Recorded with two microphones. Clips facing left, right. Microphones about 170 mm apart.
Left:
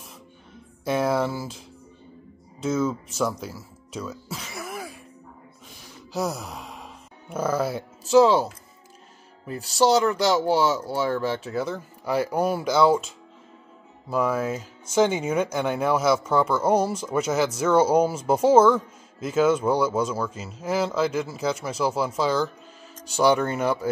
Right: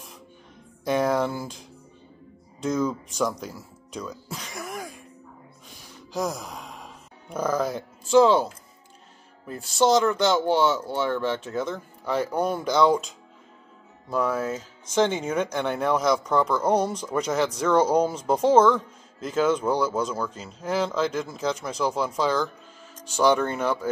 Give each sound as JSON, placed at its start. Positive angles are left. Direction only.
{"t": 0.8, "sound": "speech", "side_deg": 5}
{"t": 2.6, "sound": "speech", "side_deg": 5}
{"t": 6.1, "sound": "sigh", "side_deg": 5}
{"t": 9.6, "sound": "speech", "side_deg": 35}
{"t": 9.8, "sound": "speech", "side_deg": 10}